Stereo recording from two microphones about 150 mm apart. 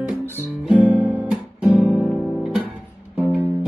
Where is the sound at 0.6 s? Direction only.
10° right (ahead or behind).